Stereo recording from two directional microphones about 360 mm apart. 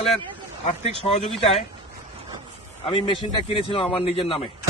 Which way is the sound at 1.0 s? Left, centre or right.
Centre.